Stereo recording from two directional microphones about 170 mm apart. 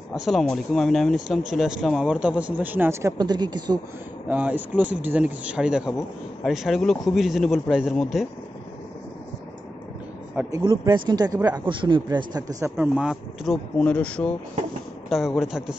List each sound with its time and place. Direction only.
0.1 s speech: centre (ahead or behind); by 3.8 s 25° right (ahead or behind)
4.3 s speech: 10° right (ahead or behind)
10.5 s speech: 25° right (ahead or behind)
12.7 s speech: 5° right (ahead or behind)